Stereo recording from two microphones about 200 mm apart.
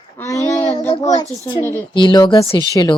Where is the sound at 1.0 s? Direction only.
20° left (ahead or behind).